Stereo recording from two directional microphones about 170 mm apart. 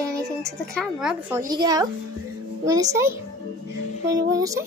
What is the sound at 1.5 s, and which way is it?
Speech, 25° right (ahead or behind).